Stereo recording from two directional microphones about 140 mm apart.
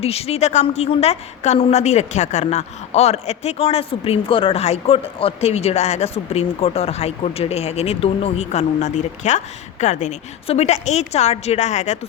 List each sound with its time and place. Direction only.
0.0 s a woman's voice: 45° left (ahead or behind)